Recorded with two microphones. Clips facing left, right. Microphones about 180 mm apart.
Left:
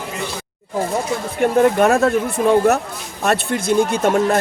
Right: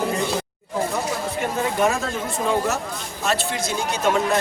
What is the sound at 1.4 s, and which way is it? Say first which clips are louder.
Speech: left 9 dB; 60° left (ahead or behind).